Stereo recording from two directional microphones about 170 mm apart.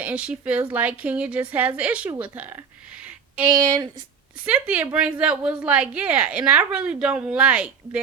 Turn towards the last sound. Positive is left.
turn(degrees=-5)  # may be behind; listen again after turning